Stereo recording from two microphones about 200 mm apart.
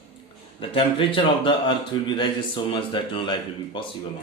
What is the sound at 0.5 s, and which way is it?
Speech, 25° left (ahead or behind).